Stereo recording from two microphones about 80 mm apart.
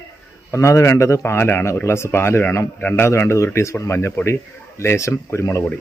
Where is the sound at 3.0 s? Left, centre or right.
Left.